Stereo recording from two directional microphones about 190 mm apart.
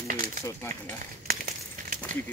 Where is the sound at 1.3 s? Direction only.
45° right (ahead or behind).